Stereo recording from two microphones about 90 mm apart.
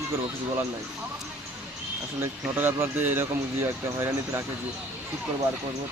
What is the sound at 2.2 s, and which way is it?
Speech, 25° right (ahead or behind).